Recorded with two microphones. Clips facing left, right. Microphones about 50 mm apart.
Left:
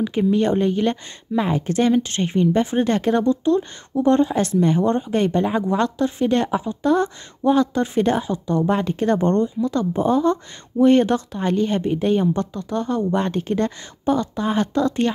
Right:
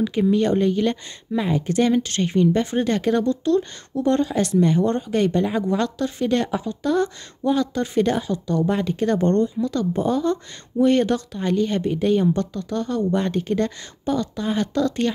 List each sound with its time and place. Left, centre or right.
0.3 s speech: left